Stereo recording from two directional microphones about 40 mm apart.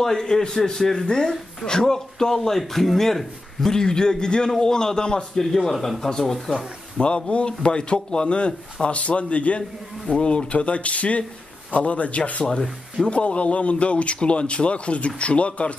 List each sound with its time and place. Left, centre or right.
0.0 s speech: centre
3.7 s speech: centre
5.4 s speech: centre
7.0 s a man's voice: left
9.6 s a man's voice: centre
12.4 s speech: centre
13.1 s a man's voice: left